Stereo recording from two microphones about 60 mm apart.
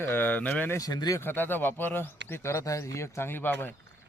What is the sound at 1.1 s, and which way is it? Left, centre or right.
Speech, left.